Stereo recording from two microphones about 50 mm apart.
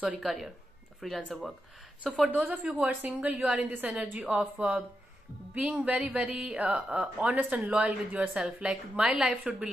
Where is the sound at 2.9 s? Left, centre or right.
Right.